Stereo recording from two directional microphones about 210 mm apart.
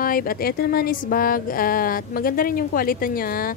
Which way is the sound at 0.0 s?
45° left (ahead or behind).